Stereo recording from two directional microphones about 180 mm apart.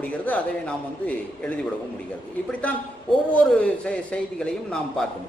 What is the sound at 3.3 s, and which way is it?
A man's voice, 5° left (ahead or behind).